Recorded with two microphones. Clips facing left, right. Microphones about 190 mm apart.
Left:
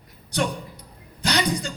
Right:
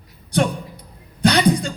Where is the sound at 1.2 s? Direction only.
60° right (ahead or behind).